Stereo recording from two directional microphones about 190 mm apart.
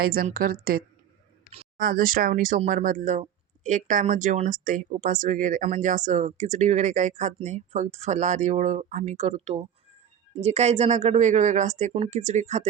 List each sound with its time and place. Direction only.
0.0 s a woman's voice: 50° right (ahead or behind)